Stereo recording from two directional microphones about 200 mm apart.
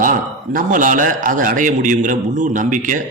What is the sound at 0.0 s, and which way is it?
A man's voice, 45° right (ahead or behind).